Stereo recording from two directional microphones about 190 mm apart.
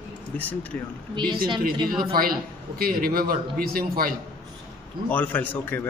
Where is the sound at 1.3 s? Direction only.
25° right (ahead or behind).